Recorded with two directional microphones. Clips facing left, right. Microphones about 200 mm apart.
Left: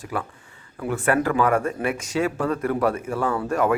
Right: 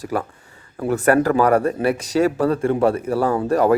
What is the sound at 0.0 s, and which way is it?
Speech, 40° right (ahead or behind).